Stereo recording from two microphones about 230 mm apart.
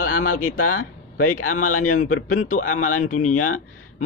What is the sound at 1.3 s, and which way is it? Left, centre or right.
Speech, left.